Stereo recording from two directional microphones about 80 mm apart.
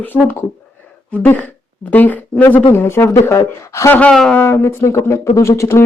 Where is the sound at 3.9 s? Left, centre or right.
Centre.